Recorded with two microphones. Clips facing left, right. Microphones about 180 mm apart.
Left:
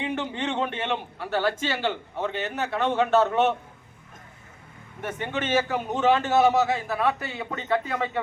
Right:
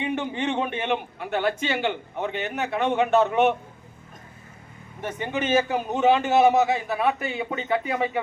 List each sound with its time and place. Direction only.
0.2 s a man's voice: 15° right (ahead or behind)
5.2 s a man's voice: 15° right (ahead or behind)